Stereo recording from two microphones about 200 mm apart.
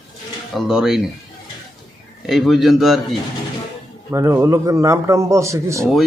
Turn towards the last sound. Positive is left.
turn(degrees=-15)  # may be behind; listen again after turning